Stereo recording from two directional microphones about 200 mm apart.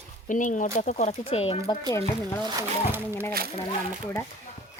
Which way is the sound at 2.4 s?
20° right (ahead or behind).